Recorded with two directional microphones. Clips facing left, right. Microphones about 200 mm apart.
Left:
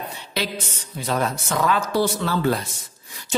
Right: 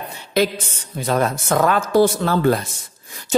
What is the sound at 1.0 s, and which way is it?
Speech, 50° right (ahead or behind).